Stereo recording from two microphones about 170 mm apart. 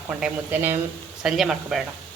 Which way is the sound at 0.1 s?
10° right (ahead or behind).